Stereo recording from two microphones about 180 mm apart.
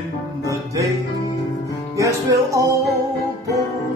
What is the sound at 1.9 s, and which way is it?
Music, 15° right (ahead or behind).